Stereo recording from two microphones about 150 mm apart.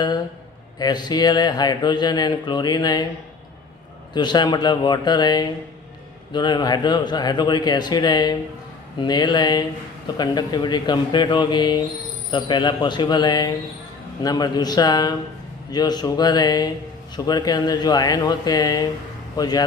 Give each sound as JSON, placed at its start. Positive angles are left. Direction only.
{"t": 0.8, "sound": "speech", "side_deg": 25}
{"t": 4.1, "sound": "speech", "side_deg": 30}